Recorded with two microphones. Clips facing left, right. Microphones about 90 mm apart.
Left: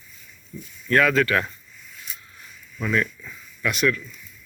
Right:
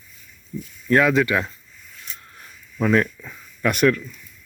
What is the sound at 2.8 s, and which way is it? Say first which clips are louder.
Speech: right 5 dB; 40° right (ahead or behind).